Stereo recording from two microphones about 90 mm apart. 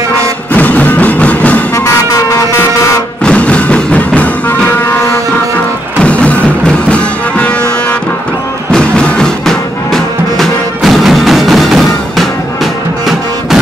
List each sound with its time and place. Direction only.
0.5 s music: 20° left (ahead or behind)
3.3 s music: 15° left (ahead or behind)
5.9 s music: 15° left (ahead or behind)
8.7 s music: 10° left (ahead or behind)